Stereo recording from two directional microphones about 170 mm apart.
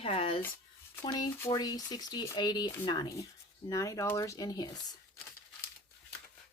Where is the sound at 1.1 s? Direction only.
20° left (ahead or behind).